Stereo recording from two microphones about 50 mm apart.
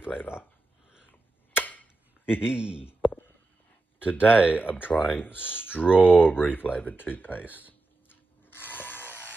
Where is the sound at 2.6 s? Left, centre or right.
Right.